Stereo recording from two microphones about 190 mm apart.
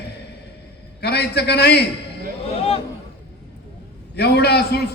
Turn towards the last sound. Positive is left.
turn(degrees=60)  # may be behind; listen again after turning